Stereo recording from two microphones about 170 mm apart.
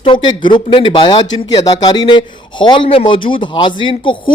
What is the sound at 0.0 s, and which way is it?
Speech, 30° left (ahead or behind).